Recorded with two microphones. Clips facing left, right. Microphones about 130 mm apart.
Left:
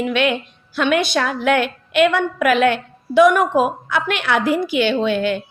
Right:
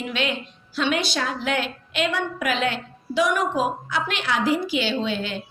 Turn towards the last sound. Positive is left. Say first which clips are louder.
# left 8 dB
turn(degrees=60)  # may be behind; listen again after turning